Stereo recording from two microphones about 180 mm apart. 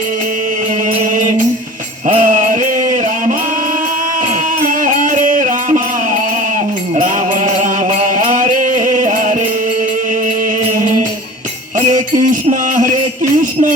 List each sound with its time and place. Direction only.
2.0 s a sound: 45° right (ahead or behind)
4.6 s music: 45° right (ahead or behind)
6.9 s mantra: 45° right (ahead or behind)
10.8 s music: 45° right (ahead or behind)
13.3 s jingle bell: 45° right (ahead or behind)